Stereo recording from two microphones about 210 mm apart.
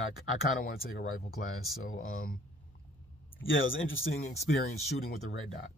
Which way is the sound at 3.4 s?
70° left (ahead or behind).